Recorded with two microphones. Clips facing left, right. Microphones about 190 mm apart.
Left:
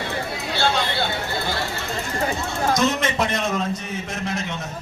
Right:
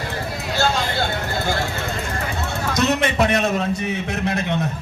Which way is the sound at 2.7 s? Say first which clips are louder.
Right 5 dB; 65° right (ahead or behind).